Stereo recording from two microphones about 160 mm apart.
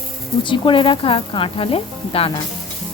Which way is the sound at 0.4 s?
30° left (ahead or behind).